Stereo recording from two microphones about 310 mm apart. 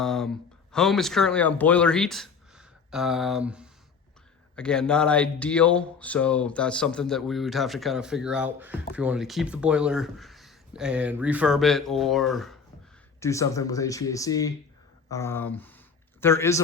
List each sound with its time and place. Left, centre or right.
0.0 s speech: centre